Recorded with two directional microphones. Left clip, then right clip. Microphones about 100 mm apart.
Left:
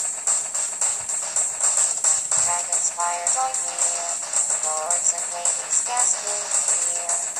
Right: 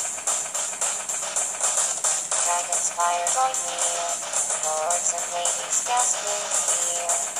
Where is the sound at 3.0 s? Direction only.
20° left (ahead or behind).